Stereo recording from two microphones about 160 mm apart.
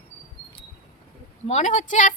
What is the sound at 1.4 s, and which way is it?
Speech, 45° left (ahead or behind).